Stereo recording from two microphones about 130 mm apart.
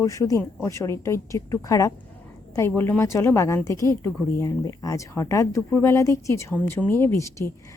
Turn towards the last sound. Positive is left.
turn(degrees=20)  # may be behind; listen again after turning